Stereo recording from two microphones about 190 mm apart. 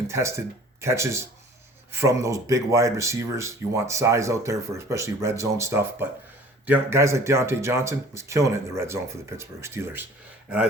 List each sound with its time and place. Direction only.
0.1 s speech: 15° right (ahead or behind)